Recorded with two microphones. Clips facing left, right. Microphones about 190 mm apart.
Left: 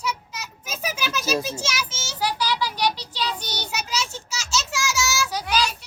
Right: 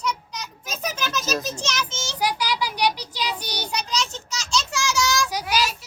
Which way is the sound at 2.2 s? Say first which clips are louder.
Even; 15° right (ahead or behind).